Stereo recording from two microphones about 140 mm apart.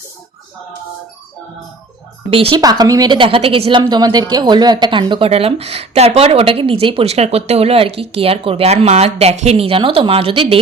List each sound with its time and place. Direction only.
2.3 s a woman's voice: 40° right (ahead or behind)
2.6 s a woman's voice: 25° right (ahead or behind)